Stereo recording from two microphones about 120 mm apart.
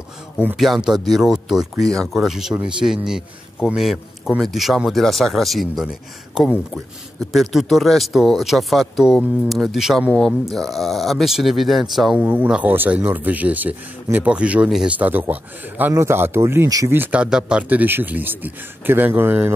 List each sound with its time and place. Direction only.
0.6 s speech: 5° right (ahead or behind)
12.2 s speech: 15° right (ahead or behind)
16.9 s speech: 15° right (ahead or behind)